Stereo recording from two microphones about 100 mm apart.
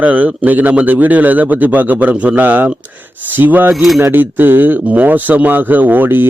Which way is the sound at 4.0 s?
20° right (ahead or behind).